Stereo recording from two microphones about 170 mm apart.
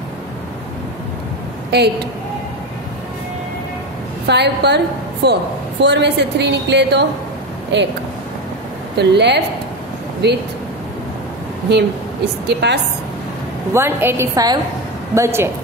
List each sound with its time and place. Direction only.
1.7 s a woman's voice: 75° right (ahead or behind)
4.3 s a woman's voice: 85° right
8.9 s a woman's voice: 90° right
12.4 s a woman's voice: 80° right
13.7 s a woman's voice: 15° right (ahead or behind)